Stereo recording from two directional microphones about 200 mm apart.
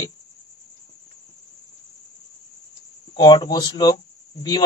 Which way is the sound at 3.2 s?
20° left (ahead or behind).